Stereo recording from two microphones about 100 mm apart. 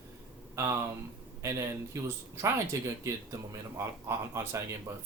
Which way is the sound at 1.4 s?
30° right (ahead or behind).